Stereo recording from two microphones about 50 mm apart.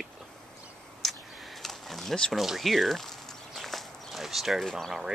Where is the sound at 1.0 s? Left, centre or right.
Centre.